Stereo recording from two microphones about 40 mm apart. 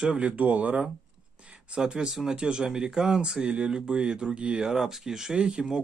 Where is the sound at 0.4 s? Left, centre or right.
Right.